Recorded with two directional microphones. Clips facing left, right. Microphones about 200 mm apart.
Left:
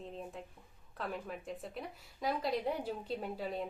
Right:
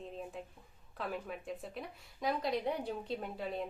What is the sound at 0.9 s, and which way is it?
Speech, centre (ahead or behind).